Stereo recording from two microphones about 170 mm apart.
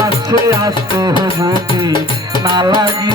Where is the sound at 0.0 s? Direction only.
20° right (ahead or behind).